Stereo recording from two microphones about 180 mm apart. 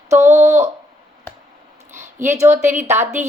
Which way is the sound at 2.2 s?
15° right (ahead or behind).